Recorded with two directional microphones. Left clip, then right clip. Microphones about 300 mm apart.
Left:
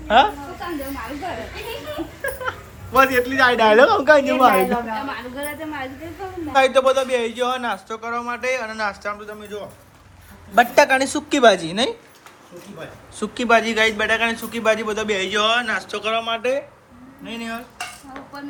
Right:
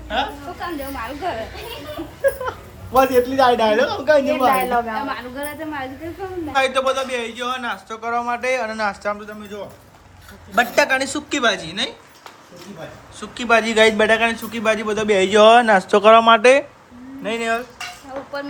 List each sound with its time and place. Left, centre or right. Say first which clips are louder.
0.1 s a sound: left 8 dB; centre
2.9 s a man's voice: right 1 dB; centre
13.1 s a woman's voice: left 4 dB; centre
13.5 s speech: right 2 dB; centre